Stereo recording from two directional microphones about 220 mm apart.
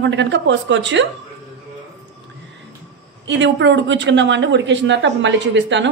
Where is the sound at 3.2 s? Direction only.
55° right (ahead or behind).